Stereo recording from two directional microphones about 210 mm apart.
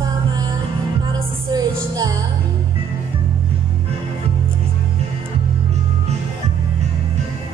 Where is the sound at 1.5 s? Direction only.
20° right (ahead or behind).